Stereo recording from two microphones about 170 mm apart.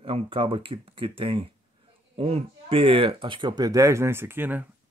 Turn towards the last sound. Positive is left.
turn(degrees=-10)  # may be behind; listen again after turning